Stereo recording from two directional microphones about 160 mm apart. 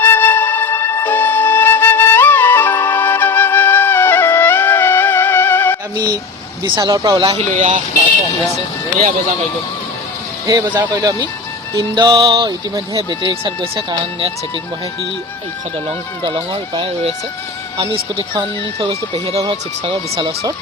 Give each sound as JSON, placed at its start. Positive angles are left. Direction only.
{"t": 0.0, "sound": "music", "side_deg": 10}
{"t": 6.7, "sound": "speech", "side_deg": -25}
{"t": 7.5, "sound": "speech", "side_deg": -45}
{"t": 10.4, "sound": "speech", "side_deg": -20}
{"t": 16.2, "sound": "speech", "side_deg": -30}